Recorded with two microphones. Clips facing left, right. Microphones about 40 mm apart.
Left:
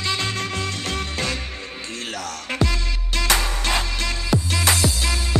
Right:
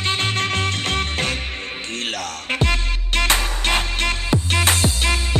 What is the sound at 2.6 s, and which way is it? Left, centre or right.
Music, right.